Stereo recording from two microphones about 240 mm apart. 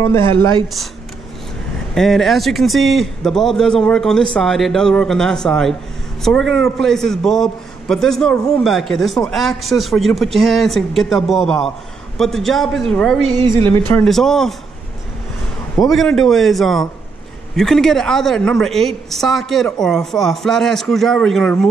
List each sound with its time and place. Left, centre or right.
0.0 s a woman's voice: centre
0.3 s a woman's voice: right
2.0 s a man's voice: centre
13.3 s a woman's voice: right
13.7 s a man's voice: centre
15.8 s a man's voice: centre